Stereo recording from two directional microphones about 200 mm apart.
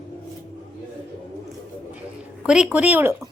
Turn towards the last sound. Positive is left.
turn(degrees=-10)  # may be behind; listen again after turning